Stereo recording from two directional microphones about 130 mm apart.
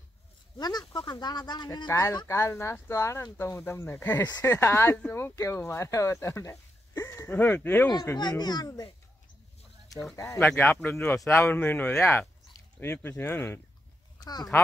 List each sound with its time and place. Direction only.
0.6 s speech: 30° left (ahead or behind)
1.9 s speech: 20° left (ahead or behind)
7.9 s speech: 30° left (ahead or behind)
10.1 s speech: 25° left (ahead or behind)
14.2 s speech: 30° left (ahead or behind)